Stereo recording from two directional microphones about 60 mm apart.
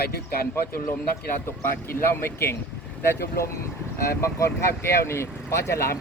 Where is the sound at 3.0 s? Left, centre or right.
Left.